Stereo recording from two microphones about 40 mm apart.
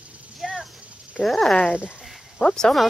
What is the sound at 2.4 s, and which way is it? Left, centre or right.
Speech, centre.